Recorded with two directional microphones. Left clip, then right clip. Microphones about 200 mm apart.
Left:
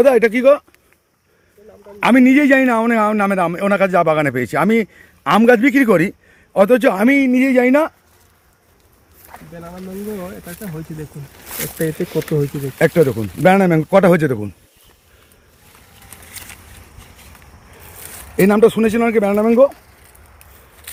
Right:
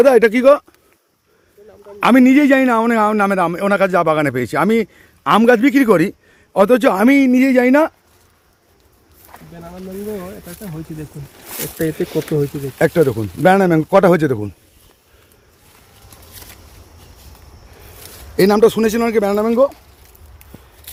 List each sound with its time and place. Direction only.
0.0 s speech: 30° right (ahead or behind)
2.0 s a man's voice: 15° right (ahead or behind)
4.4 s a man's voice: 15° right (ahead or behind)
9.3 s a sound: 20° left (ahead or behind)
11.4 s speech: centre (ahead or behind)
18.3 s speech: 5° right (ahead or behind)